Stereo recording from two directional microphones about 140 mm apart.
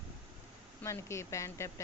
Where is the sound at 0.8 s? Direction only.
20° left (ahead or behind).